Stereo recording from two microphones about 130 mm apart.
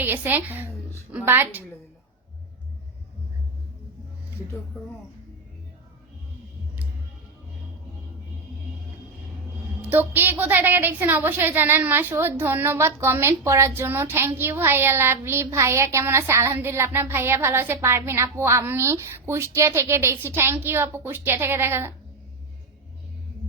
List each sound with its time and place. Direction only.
0.0 s a woman's voice: 15° right (ahead or behind)
9.8 s a woman's voice: 15° right (ahead or behind)